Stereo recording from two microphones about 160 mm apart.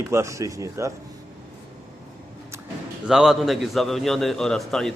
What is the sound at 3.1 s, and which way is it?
A man's voice, 5° right (ahead or behind).